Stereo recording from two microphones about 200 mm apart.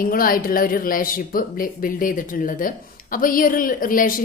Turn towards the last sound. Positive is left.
turn(degrees=45)  # may be behind; listen again after turning